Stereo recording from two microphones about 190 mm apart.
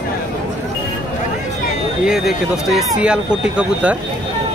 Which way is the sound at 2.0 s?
5° right (ahead or behind).